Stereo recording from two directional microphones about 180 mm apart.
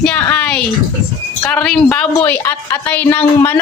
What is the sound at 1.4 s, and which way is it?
A woman's voice, 5° left (ahead or behind).